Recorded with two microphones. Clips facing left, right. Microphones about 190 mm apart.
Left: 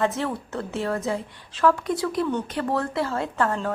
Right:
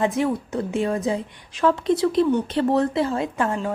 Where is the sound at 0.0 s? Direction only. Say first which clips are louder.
Right 4 dB; 15° right (ahead or behind).